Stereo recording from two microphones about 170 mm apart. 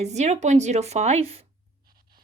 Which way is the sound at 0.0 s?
40° right (ahead or behind).